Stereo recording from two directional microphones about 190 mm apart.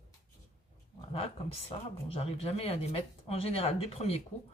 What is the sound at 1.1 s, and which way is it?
Speech, 30° left (ahead or behind).